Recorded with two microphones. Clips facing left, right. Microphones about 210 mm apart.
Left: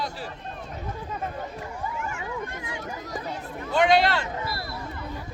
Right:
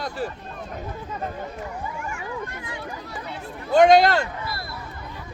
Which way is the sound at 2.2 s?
20° left (ahead or behind).